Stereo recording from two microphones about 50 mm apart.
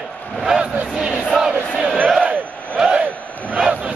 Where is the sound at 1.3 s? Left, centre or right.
Centre.